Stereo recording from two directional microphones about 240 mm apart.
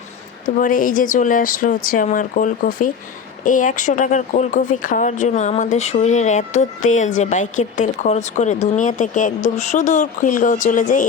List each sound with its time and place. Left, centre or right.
0.6 s a woman's voice: left